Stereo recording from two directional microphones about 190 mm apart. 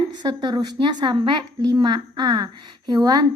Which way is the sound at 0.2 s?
20° right (ahead or behind).